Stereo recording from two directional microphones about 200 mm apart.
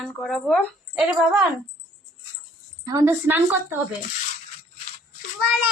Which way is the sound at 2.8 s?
15° right (ahead or behind).